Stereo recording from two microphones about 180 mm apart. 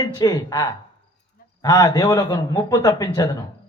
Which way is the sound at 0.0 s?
20° left (ahead or behind).